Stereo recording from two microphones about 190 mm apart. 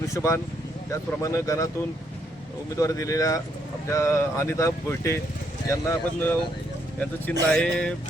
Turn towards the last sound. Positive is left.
turn(degrees=5)  # may be behind; listen again after turning